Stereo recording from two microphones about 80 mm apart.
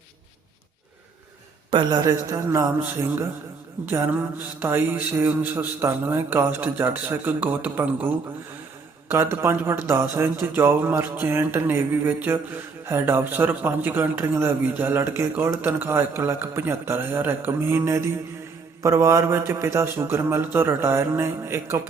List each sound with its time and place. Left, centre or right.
1.7 s a man's voice: right